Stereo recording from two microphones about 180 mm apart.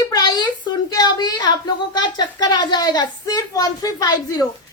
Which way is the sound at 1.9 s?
25° left (ahead or behind).